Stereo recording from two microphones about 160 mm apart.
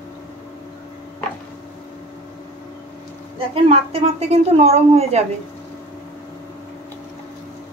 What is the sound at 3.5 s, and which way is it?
Speech, 40° right (ahead or behind).